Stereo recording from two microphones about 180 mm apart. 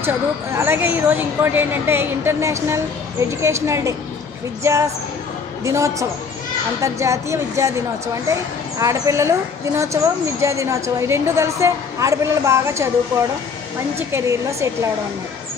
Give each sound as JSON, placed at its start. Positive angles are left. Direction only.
{"t": 0.0, "sound": "speech", "side_deg": -15}
{"t": 5.6, "sound": "speech", "side_deg": -15}
{"t": 13.9, "sound": "speech", "side_deg": -15}